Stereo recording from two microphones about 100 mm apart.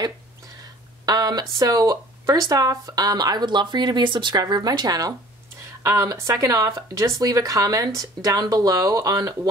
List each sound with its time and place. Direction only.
1.0 s speech: 40° right (ahead or behind)